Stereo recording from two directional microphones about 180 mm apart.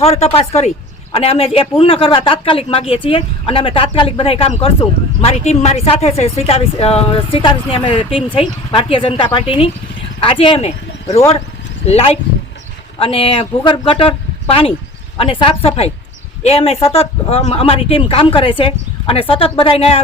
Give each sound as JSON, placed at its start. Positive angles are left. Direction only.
{"t": 0.0, "sound": "a woman's voice", "side_deg": 35}
{"t": 11.9, "sound": "speech", "side_deg": 35}